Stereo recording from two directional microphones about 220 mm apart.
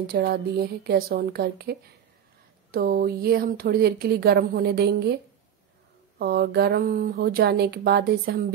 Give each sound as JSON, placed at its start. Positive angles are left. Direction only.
{"t": 0.0, "sound": "speech", "side_deg": -45}
{"t": 6.1, "sound": "speech", "side_deg": -45}